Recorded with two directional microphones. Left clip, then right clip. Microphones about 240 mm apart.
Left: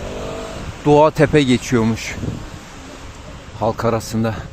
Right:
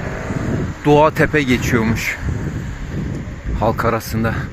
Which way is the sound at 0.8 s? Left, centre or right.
Centre.